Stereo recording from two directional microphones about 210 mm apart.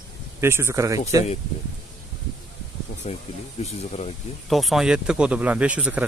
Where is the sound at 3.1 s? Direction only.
35° left (ahead or behind).